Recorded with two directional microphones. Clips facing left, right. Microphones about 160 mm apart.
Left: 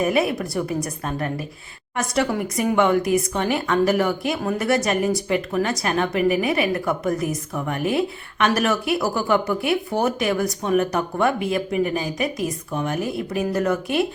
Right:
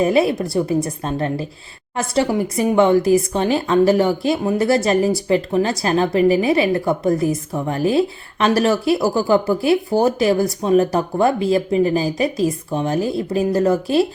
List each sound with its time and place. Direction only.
0.0 s speech: 30° right (ahead or behind)